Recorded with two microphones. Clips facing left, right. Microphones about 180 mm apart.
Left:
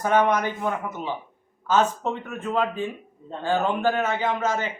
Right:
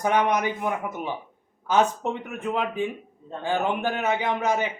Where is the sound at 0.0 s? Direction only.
15° right (ahead or behind).